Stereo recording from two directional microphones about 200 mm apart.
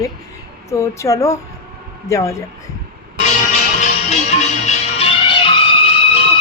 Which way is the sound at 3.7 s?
35° left (ahead or behind).